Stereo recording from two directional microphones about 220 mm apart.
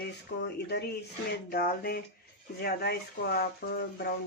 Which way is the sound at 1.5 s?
45° left (ahead or behind).